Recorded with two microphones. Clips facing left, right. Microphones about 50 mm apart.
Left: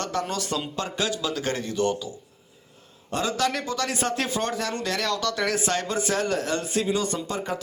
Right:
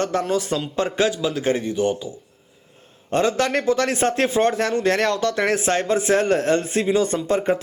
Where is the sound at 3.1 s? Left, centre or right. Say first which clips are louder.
Right 6 dB; right.